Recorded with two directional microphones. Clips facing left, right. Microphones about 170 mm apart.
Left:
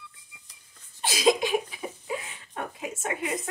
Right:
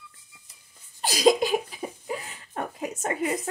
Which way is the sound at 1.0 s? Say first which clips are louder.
Right 3 dB; 40° right (ahead or behind).